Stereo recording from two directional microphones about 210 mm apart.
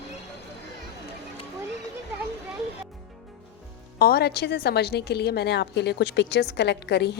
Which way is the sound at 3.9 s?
45° left (ahead or behind).